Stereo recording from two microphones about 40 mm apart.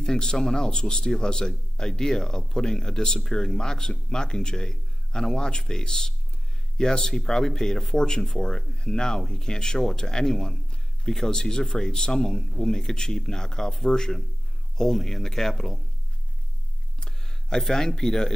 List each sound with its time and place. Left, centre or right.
0.0 s speech: centre
17.0 s speech: centre